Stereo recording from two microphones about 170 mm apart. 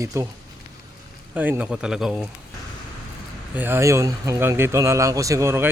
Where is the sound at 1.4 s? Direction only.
10° right (ahead or behind).